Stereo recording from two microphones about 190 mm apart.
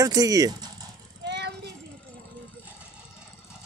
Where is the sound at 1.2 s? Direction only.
65° right (ahead or behind).